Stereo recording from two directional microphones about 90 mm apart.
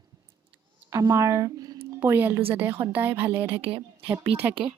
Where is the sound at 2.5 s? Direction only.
25° right (ahead or behind).